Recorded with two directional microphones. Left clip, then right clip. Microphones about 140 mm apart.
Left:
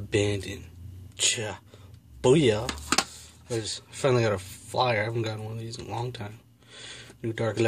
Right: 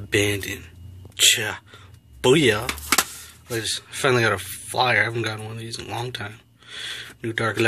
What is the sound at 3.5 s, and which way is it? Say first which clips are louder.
Speech: right 6 dB; 10° left (ahead or behind).